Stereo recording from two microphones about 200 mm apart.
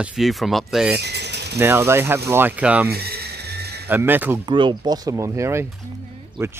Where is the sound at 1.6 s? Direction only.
10° right (ahead or behind).